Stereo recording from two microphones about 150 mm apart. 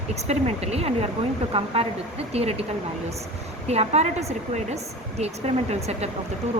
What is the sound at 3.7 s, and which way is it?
Speech, 45° right (ahead or behind).